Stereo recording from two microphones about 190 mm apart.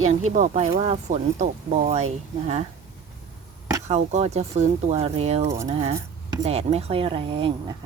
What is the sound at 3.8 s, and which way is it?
Speech, 35° right (ahead or behind).